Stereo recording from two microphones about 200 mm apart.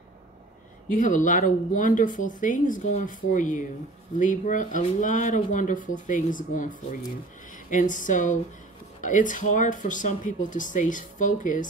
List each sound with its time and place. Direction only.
0.8 s speech: 40° left (ahead or behind)